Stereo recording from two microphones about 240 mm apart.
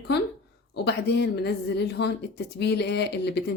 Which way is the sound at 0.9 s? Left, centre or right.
Left.